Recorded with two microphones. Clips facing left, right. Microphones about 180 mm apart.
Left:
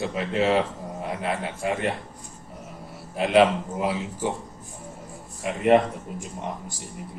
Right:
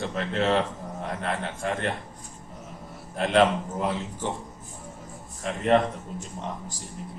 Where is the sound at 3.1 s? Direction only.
5° left (ahead or behind).